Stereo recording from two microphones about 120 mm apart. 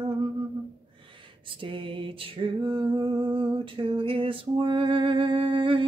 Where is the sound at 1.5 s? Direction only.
45° right (ahead or behind).